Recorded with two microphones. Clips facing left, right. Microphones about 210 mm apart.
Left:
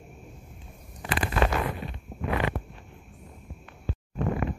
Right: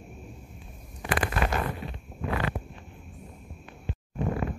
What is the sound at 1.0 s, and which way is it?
Zipper, 25° left (ahead or behind).